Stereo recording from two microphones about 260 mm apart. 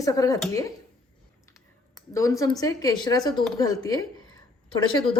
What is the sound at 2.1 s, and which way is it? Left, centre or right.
A woman's voice, centre.